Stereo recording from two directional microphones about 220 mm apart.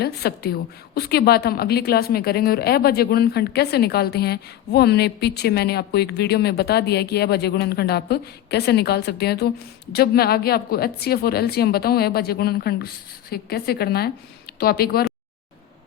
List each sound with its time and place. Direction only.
0.0 s a woman's voice: 45° left (ahead or behind)